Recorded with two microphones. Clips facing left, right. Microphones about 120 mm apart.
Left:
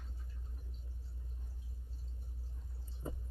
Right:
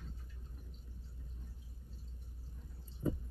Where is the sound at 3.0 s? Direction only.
25° left (ahead or behind).